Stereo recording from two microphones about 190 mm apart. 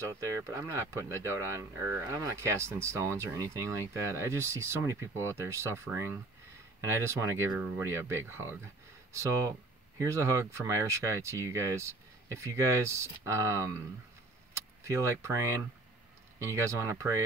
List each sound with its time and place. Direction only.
0.0 s speech: 15° right (ahead or behind)